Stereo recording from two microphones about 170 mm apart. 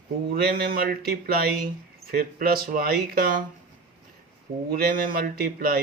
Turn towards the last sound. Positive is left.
turn(degrees=-60)  # may be behind; listen again after turning